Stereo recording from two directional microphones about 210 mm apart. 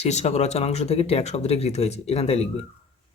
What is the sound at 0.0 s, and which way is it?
Speech, 30° left (ahead or behind).